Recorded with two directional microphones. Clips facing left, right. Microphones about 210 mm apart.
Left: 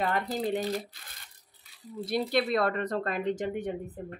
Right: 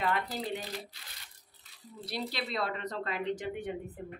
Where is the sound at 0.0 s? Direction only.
40° left (ahead or behind).